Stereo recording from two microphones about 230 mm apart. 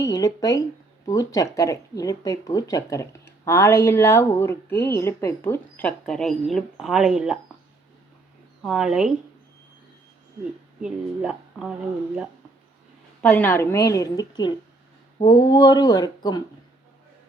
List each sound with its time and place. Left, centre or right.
0.0 s speech: centre
8.6 s speech: centre
10.8 s speech: centre
13.2 s speech: centre